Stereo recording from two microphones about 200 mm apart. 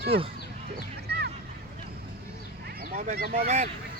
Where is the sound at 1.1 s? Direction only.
55° right (ahead or behind).